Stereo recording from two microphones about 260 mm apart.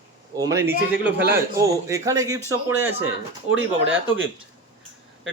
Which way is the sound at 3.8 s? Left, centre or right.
Right.